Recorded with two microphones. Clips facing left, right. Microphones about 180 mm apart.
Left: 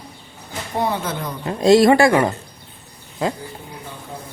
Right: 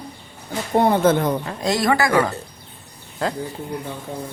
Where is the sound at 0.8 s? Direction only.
50° right (ahead or behind).